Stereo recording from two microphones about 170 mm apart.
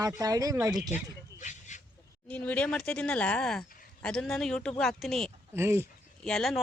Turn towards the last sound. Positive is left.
turn(degrees=0)  # may be behind; listen again after turning